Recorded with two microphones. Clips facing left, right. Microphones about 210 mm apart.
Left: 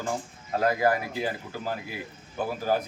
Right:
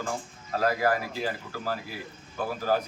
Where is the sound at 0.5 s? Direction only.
20° left (ahead or behind).